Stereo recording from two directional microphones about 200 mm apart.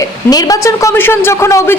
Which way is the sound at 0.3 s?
20° left (ahead or behind).